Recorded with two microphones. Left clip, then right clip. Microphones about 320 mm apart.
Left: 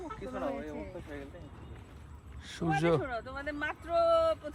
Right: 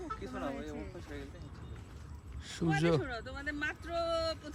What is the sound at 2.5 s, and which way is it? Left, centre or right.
Speech, centre.